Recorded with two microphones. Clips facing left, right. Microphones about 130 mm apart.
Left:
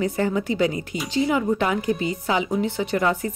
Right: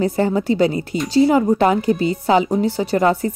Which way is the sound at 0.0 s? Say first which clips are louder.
Right 5 dB; 35° right (ahead or behind).